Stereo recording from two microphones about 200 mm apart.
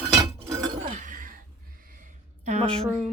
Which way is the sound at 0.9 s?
40° right (ahead or behind).